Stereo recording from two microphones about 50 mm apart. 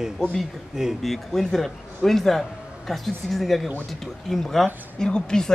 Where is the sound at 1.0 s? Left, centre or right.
Centre.